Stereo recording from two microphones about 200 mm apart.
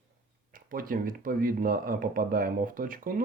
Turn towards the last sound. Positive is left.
turn(degrees=-45)  # may be behind; listen again after turning